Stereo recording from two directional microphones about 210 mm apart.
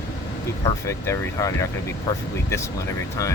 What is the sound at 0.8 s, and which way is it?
Speech, 15° left (ahead or behind).